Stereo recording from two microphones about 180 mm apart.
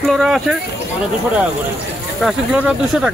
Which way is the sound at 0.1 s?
Centre (ahead or behind).